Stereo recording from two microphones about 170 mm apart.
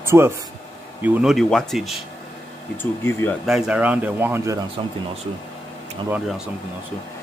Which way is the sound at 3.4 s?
5° right (ahead or behind).